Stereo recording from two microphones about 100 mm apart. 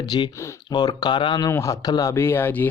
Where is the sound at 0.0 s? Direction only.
45° left (ahead or behind).